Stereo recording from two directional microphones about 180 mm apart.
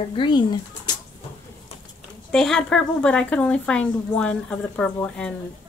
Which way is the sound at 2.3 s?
Centre (ahead or behind).